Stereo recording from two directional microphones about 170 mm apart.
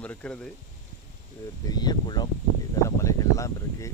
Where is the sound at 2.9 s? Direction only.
20° left (ahead or behind).